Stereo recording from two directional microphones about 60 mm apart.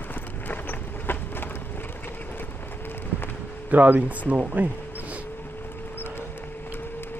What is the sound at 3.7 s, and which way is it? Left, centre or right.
Speech, right.